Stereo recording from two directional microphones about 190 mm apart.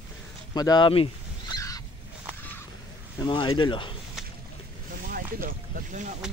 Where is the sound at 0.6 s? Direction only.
20° left (ahead or behind).